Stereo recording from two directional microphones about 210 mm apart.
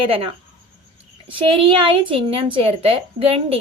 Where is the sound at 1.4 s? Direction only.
25° right (ahead or behind).